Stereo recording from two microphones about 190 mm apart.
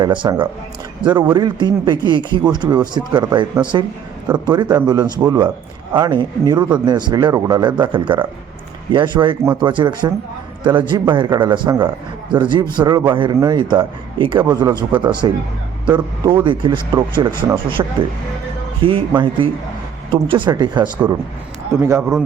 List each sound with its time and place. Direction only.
0.0 s a man's voice: 25° right (ahead or behind)
9.4 s speech: 10° right (ahead or behind)
9.6 s a man's voice: 25° right (ahead or behind)